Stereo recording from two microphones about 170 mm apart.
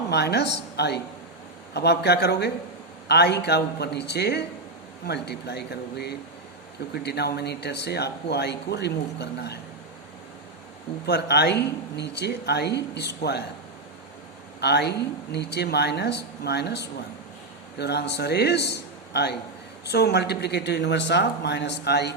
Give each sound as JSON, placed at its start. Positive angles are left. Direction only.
{"t": 0.1, "sound": "speech", "side_deg": 75}
{"t": 11.0, "sound": "speech", "side_deg": 75}
{"t": 14.6, "sound": "speech", "side_deg": 75}